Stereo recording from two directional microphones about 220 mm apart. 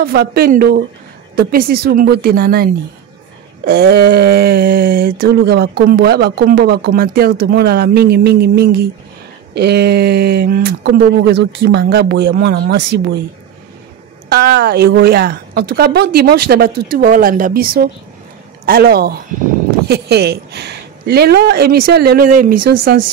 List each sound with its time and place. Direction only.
0.0 s speech: 45° right (ahead or behind)
14.3 s speech: 45° right (ahead or behind)